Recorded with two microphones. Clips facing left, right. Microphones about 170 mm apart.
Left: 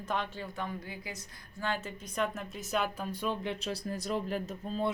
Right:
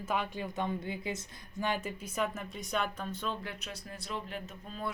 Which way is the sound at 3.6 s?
40° left (ahead or behind).